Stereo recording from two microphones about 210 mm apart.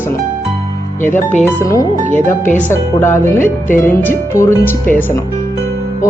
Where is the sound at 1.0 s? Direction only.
35° left (ahead or behind).